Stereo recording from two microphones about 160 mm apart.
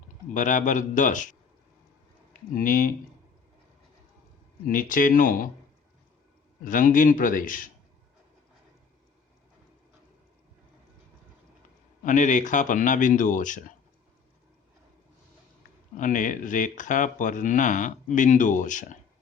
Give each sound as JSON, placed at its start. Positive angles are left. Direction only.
{"t": 0.3, "sound": "speech", "side_deg": 50}
{"t": 2.6, "sound": "a man's voice", "side_deg": 60}
{"t": 4.7, "sound": "a man's voice", "side_deg": 60}
{"t": 6.7, "sound": "a man's voice", "side_deg": 55}
{"t": 12.0, "sound": "speech", "side_deg": 50}
{"t": 16.0, "sound": "speech", "side_deg": 55}